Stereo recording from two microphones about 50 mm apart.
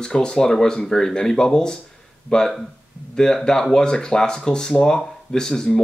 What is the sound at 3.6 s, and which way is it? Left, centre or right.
Speech, centre.